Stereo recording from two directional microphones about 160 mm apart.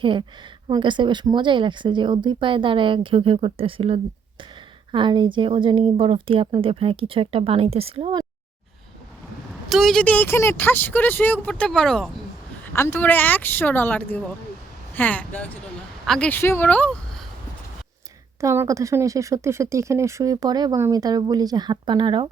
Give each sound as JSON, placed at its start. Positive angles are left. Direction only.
{"t": 0.0, "sound": "speech", "side_deg": -30}
{"t": 9.6, "sound": "speech", "side_deg": 0}
{"t": 18.3, "sound": "speech", "side_deg": -15}